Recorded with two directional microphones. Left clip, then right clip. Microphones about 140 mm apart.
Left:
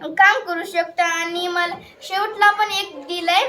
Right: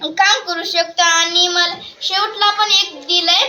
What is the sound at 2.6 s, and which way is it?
Child singing, 65° left (ahead or behind).